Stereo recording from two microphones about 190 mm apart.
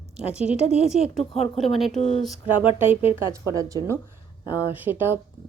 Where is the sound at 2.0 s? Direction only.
35° left (ahead or behind).